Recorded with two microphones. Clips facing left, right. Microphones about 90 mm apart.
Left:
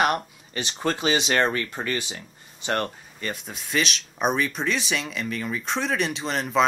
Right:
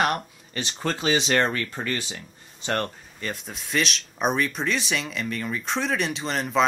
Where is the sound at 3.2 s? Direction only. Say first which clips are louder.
Left 1 dB; centre (ahead or behind).